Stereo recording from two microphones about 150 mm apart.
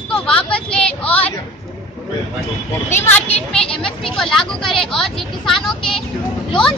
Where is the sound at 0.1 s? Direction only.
5° left (ahead or behind).